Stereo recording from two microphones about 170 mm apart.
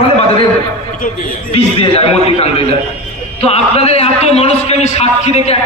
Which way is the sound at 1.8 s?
35° left (ahead or behind).